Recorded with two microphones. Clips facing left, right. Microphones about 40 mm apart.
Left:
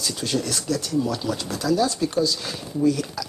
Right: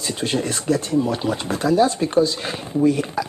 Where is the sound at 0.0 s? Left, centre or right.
Right.